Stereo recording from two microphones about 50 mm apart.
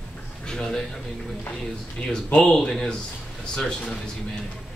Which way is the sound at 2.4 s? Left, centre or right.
Centre.